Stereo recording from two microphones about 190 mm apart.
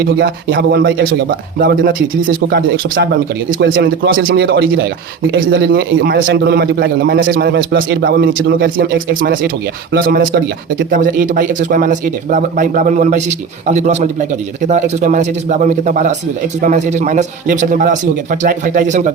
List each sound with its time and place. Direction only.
0.0 s speech: 55° right (ahead or behind)
4.4 s a man's voice: 60° right (ahead or behind); by 19.1 s 40° right (ahead or behind)